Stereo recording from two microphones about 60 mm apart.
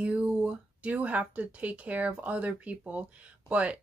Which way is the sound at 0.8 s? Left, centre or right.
Right.